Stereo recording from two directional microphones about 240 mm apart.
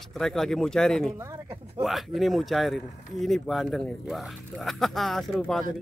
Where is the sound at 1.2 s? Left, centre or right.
Centre.